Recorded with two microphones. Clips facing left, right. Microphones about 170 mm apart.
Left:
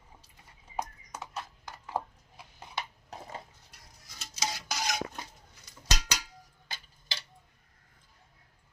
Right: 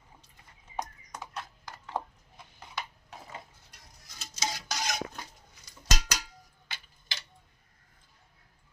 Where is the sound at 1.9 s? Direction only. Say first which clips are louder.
Left 1 dB; 10° left (ahead or behind).